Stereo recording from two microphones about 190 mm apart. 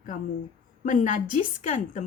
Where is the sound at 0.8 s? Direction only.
40° left (ahead or behind).